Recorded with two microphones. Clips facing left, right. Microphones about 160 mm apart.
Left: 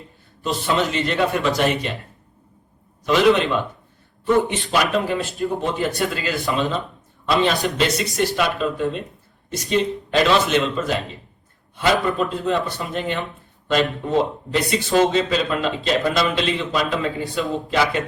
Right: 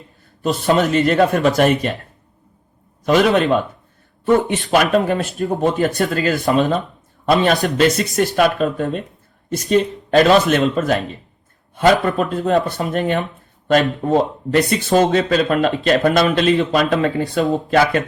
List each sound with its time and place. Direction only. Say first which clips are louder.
0.4 s speech: right 5 dB; 50° right (ahead or behind)
3.1 s speech: right 2 dB; 50° right (ahead or behind)